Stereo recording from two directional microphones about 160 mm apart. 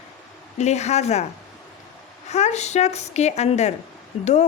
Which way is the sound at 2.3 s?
45° left (ahead or behind).